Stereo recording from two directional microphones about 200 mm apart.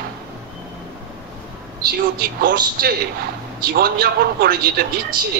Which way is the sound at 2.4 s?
55° right (ahead or behind).